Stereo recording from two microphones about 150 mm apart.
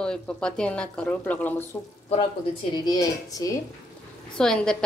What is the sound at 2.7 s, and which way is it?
Speech, 25° left (ahead or behind).